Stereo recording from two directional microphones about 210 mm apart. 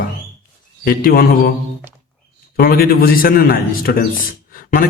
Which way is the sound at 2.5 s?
45° left (ahead or behind).